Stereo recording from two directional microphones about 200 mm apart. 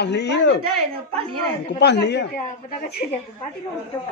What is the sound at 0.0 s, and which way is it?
Speech, 60° left (ahead or behind).